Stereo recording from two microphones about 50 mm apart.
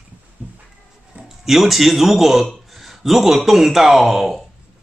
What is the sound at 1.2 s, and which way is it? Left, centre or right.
A man's voice, centre.